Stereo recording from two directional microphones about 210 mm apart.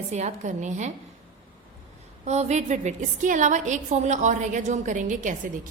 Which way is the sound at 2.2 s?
30° right (ahead or behind).